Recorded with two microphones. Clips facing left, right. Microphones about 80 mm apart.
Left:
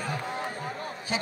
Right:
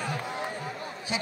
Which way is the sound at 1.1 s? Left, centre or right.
Left.